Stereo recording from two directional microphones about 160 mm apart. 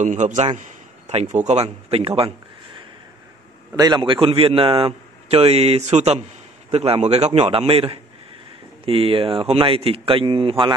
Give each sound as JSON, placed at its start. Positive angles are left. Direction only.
{"t": 0.0, "sound": "a man's voice", "side_deg": -50}
{"t": 3.7, "sound": "a man's voice", "side_deg": -25}